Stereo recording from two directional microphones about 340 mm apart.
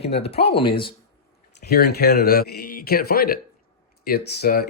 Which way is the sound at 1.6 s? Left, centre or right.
Left.